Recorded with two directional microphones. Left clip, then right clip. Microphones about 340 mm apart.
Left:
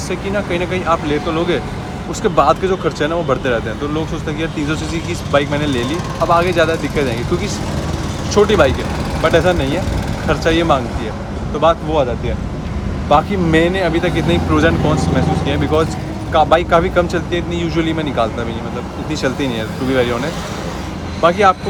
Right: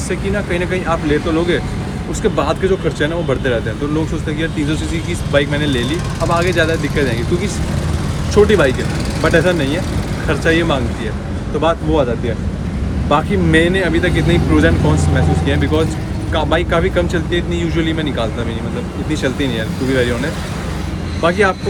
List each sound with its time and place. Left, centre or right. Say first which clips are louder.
0.1 s speech: even; centre
2.2 s speech: left 3 dB; centre
5.3 s speech: even; centre
13.1 s speech: left 2 dB; centre
19.5 s speech: even; centre
21.2 s speech: left 3 dB; centre